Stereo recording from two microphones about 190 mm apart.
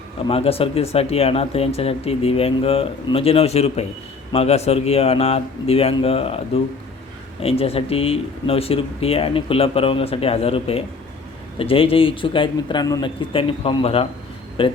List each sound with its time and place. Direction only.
0.3 s speech: 30° left (ahead or behind)